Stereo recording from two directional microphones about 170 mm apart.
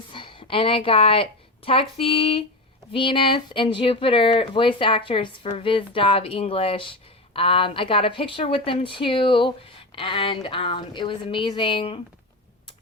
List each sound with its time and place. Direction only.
0.1 s a woman's voice: 30° left (ahead or behind)